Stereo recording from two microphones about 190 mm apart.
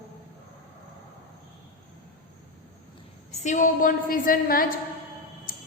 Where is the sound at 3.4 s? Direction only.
40° left (ahead or behind).